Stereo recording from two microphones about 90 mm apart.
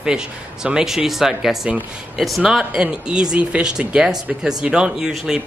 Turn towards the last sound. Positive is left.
turn(degrees=-5)  # may be behind; listen again after turning